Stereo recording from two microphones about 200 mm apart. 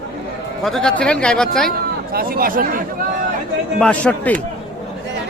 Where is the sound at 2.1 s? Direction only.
50° right (ahead or behind).